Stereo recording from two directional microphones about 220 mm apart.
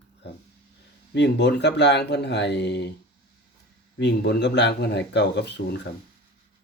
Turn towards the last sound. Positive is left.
turn(degrees=50)  # may be behind; listen again after turning